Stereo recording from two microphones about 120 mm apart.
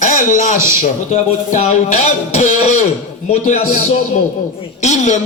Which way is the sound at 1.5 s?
70° left (ahead or behind).